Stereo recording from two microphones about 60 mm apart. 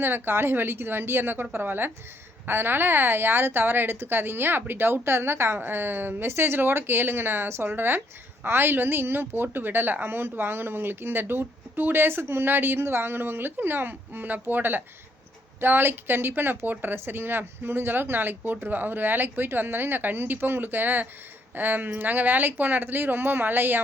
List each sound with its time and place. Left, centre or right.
0.0 s a woman's voice: right